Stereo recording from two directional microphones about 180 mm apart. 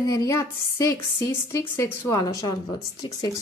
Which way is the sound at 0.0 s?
20° left (ahead or behind).